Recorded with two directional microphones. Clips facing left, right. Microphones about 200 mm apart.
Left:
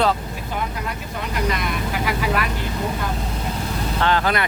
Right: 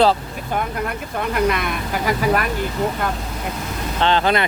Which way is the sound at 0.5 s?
55° right (ahead or behind).